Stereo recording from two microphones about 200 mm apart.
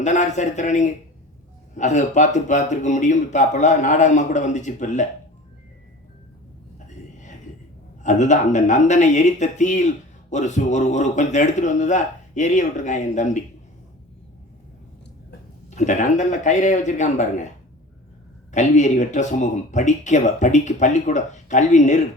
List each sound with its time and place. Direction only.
0.0 s speech: 35° left (ahead or behind)
6.7 s a sound: 40° left (ahead or behind)
8.0 s speech: 35° left (ahead or behind)
15.7 s speech: 35° left (ahead or behind)
18.5 s speech: 35° left (ahead or behind)